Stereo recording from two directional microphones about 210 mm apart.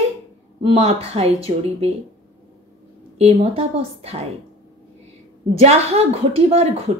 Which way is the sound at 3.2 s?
30° right (ahead or behind).